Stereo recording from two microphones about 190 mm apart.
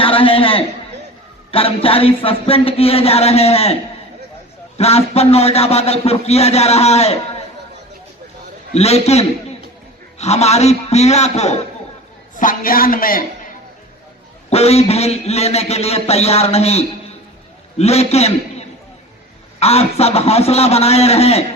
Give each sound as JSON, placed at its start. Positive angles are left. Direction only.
{"t": 0.0, "sound": "a sound", "side_deg": 30}
{"t": 1.5, "sound": "a man's voice", "side_deg": 30}
{"t": 4.8, "sound": "a man's voice", "side_deg": 35}
{"t": 8.7, "sound": "a man's voice", "side_deg": 35}
{"t": 12.4, "sound": "a man's voice", "side_deg": 45}
{"t": 14.5, "sound": "a man's voice", "side_deg": 35}
{"t": 19.5, "sound": "a man's voice", "side_deg": 35}